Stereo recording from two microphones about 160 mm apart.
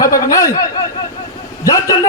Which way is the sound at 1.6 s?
20° left (ahead or behind).